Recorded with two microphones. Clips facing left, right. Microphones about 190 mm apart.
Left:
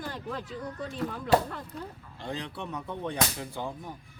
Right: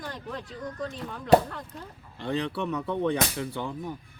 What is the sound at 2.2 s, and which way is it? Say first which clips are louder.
Speech: right 7 dB; 65° right (ahead or behind).